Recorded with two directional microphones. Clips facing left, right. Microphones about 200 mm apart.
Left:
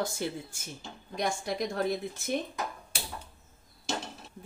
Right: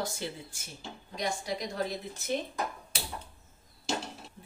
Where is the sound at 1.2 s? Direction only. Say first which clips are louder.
Left 3 dB; 55° left (ahead or behind).